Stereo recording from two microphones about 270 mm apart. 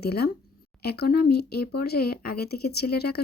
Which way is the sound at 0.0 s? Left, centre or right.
Left.